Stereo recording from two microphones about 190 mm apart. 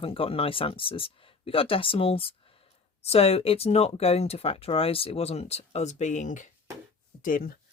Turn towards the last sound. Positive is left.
turn(degrees=45)  # may be behind; listen again after turning